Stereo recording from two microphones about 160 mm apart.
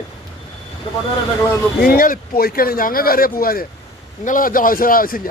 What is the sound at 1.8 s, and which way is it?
A man's voice, 65° left (ahead or behind).